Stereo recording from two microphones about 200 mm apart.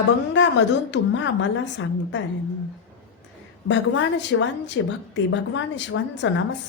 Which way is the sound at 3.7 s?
65° left (ahead or behind).